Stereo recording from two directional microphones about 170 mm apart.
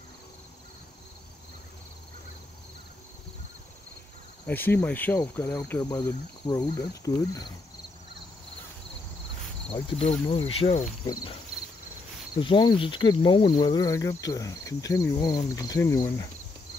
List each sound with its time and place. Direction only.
4.5 s cricket: 10° left (ahead or behind)
5.8 s speech: 25° left (ahead or behind)
9.7 s insect: 35° left (ahead or behind)
12.4 s speech: 25° left (ahead or behind)